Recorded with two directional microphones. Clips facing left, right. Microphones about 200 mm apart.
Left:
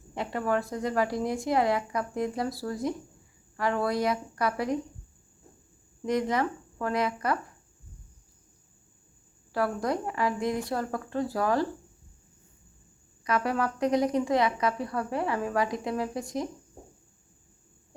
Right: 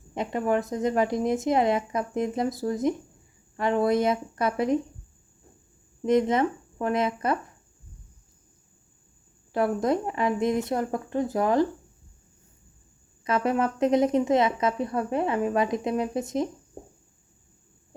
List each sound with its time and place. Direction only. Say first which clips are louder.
0.1 s a woman's voice: right 3 dB; 20° right (ahead or behind)
6.1 s a woman's voice: right 5 dB; 25° right (ahead or behind)
9.5 s a woman's voice: right 4 dB; 20° right (ahead or behind)
13.2 s a woman's voice: right 3 dB; 25° right (ahead or behind)